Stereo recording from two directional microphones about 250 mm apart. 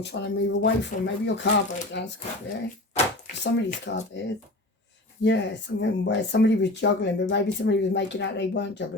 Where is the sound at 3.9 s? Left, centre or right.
Left.